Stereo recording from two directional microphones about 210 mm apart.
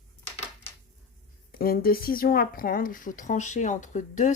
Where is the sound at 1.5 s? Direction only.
45° left (ahead or behind).